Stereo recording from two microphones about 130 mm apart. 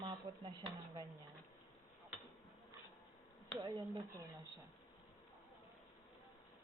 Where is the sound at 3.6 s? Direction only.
30° right (ahead or behind).